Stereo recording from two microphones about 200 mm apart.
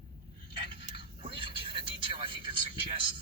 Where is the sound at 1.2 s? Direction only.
25° right (ahead or behind).